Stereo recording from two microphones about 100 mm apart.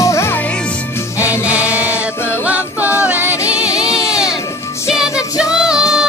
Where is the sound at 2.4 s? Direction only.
15° right (ahead or behind).